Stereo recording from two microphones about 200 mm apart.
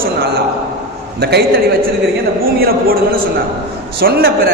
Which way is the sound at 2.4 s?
50° right (ahead or behind).